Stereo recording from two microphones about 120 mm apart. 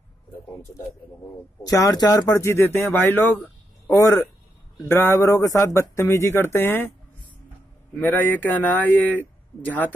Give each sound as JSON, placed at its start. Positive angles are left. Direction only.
{"t": 1.6, "sound": "speech", "side_deg": 30}
{"t": 3.4, "sound": "a sound", "side_deg": 20}
{"t": 4.8, "sound": "speech", "side_deg": 20}
{"t": 8.0, "sound": "speech", "side_deg": 15}